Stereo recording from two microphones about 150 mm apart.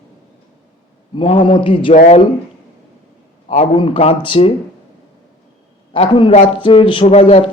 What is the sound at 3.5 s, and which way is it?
A man's voice, 45° left (ahead or behind).